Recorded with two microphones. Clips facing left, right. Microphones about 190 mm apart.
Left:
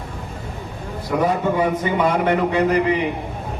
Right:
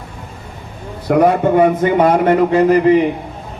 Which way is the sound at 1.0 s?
60° right (ahead or behind).